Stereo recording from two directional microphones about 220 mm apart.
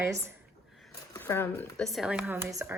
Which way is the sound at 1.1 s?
10° left (ahead or behind).